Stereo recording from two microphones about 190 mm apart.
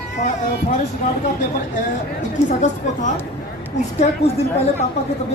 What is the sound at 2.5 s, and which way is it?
A woman's voice, 40° left (ahead or behind).